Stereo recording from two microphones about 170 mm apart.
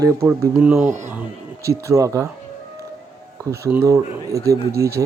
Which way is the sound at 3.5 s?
15° right (ahead or behind).